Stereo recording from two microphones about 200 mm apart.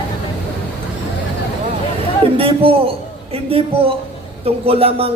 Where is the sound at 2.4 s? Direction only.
30° right (ahead or behind).